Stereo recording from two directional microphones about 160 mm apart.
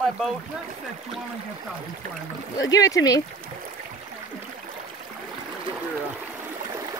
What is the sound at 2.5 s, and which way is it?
Speech, 20° left (ahead or behind).